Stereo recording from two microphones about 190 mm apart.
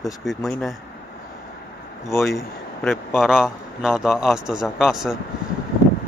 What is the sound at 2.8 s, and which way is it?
A man's voice, centre (ahead or behind).